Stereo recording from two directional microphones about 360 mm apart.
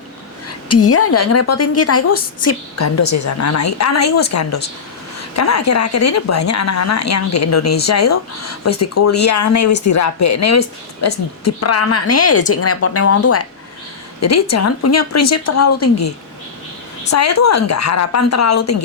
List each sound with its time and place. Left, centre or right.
0.4 s a woman's voice: left
17.1 s a woman's voice: left